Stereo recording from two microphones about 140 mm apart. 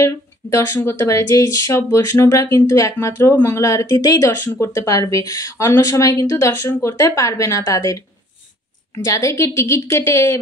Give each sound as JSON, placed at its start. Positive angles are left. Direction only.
{"t": 0.0, "sound": "speech", "side_deg": 20}